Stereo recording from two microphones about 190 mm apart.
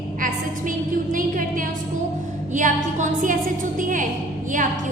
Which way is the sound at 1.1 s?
45° right (ahead or behind).